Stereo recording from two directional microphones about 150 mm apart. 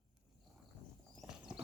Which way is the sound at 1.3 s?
5° right (ahead or behind).